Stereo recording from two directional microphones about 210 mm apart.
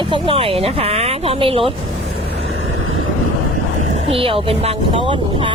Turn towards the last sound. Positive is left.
turn(degrees=-25)  # may be behind; listen again after turning